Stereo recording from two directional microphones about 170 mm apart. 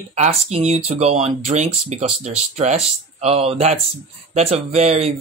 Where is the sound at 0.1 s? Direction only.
40° right (ahead or behind).